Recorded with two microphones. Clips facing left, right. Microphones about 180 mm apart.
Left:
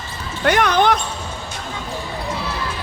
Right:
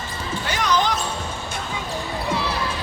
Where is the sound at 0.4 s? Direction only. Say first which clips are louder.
Left 7 dB; 60° left (ahead or behind).